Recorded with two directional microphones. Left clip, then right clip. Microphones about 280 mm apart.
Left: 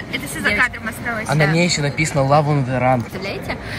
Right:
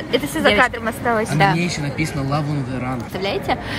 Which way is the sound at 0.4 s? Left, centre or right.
Centre.